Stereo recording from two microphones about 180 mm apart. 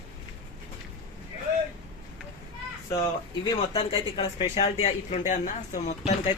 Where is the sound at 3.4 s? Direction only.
30° left (ahead or behind).